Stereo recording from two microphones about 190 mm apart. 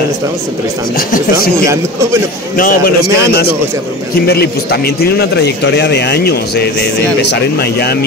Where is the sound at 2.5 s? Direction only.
50° left (ahead or behind).